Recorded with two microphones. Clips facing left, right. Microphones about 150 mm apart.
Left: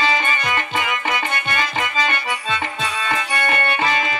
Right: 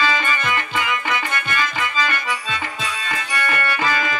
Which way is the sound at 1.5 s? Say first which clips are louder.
Even; 25° left (ahead or behind).